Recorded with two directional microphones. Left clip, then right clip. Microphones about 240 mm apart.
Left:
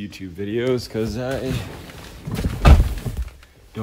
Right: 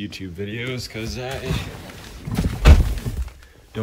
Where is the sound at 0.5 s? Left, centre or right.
Left.